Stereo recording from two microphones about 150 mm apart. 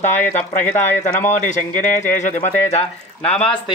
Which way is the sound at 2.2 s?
55° left (ahead or behind).